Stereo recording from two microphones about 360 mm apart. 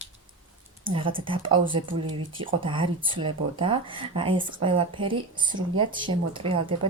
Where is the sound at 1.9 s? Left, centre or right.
Right.